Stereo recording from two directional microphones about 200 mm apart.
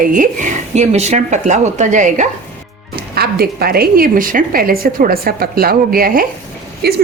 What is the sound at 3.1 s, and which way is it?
Speech, 50° right (ahead or behind).